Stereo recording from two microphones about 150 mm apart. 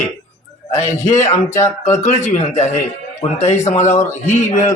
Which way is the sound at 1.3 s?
20° left (ahead or behind).